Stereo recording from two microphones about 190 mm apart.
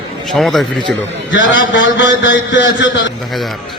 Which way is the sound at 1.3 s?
75° left (ahead or behind).